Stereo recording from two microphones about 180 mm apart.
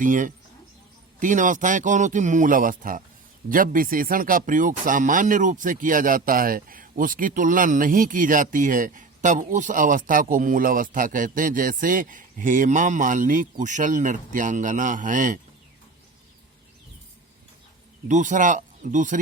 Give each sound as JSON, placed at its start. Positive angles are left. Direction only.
{"t": 0.0, "sound": "speech", "side_deg": -45}
{"t": 18.1, "sound": "speech", "side_deg": -45}